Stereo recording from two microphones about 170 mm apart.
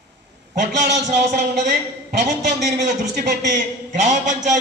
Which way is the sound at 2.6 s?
45° right (ahead or behind).